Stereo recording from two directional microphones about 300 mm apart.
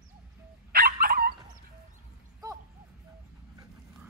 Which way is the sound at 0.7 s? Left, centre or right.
Right.